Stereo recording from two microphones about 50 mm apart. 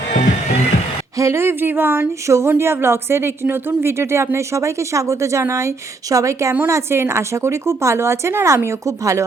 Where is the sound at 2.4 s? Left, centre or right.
Right.